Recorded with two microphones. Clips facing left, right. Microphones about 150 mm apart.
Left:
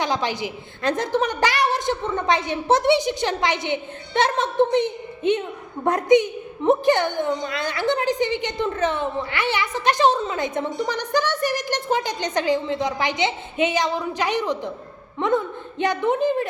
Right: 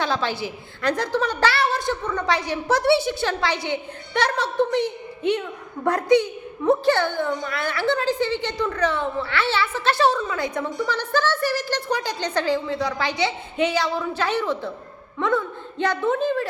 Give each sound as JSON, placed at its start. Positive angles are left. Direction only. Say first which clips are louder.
{"t": 0.0, "sound": "a woman's voice", "louder": "left 1 dB", "side_deg": 15}